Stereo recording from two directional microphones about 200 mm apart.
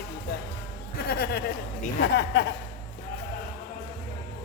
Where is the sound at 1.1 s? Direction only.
50° left (ahead or behind).